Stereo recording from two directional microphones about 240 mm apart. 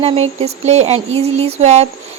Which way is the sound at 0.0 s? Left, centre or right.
Right.